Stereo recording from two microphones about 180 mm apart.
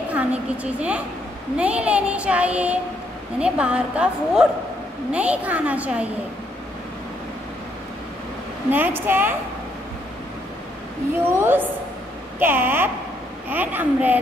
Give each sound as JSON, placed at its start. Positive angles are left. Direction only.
{"t": 0.1, "sound": "a woman's voice", "side_deg": -5}
{"t": 1.6, "sound": "child singing", "side_deg": -5}
{"t": 3.3, "sound": "a woman's voice", "side_deg": -5}
{"t": 5.1, "sound": "child singing", "side_deg": -5}
{"t": 8.6, "sound": "child singing", "side_deg": -10}
{"t": 11.3, "sound": "child singing", "side_deg": -10}